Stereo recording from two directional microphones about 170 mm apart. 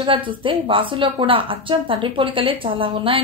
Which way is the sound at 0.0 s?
30° right (ahead or behind).